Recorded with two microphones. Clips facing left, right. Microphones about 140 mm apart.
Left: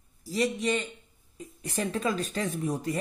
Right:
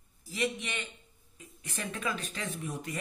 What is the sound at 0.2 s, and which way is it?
Speech, 35° left (ahead or behind).